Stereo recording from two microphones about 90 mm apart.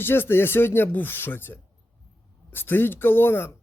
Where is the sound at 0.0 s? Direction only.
25° left (ahead or behind).